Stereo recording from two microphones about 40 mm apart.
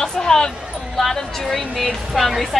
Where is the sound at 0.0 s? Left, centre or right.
Centre.